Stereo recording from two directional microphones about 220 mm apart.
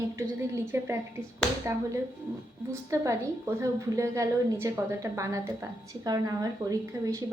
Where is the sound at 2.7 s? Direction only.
15° right (ahead or behind).